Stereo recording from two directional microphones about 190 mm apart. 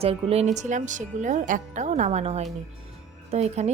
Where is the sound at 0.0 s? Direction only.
30° right (ahead or behind).